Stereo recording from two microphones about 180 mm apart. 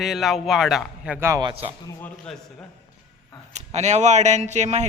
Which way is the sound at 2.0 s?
5° left (ahead or behind).